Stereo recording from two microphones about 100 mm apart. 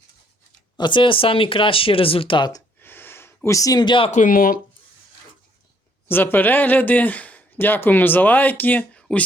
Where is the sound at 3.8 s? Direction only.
55° left (ahead or behind).